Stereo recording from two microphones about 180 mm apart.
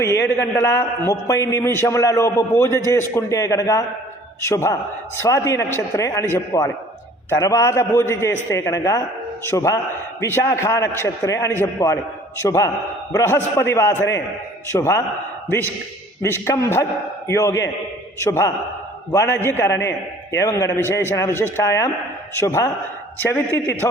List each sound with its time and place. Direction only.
0.3 s a man's voice: 15° left (ahead or behind)